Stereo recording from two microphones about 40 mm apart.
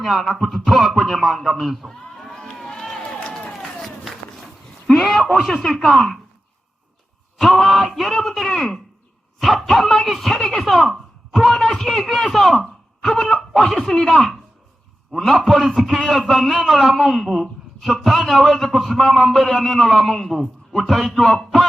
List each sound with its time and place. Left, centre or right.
0.0 s a man's voice: centre
2.3 s run: centre
3.6 s a sound: centre
5.4 s a man's voice: centre
7.3 s a man's voice: centre